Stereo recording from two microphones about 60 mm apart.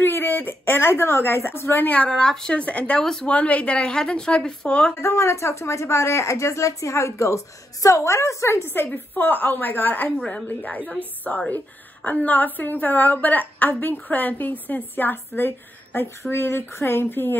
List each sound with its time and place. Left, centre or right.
0.0 s a woman's voice: left
1.8 s a woman's voice: left
2.0 s a woman's voice: centre
3.0 s a woman's voice: centre
3.3 s a woman's voice: left
5.0 s speech: left
8.8 s a woman's voice: left
10.1 s a woman's voice: centre
10.6 s a woman's voice: left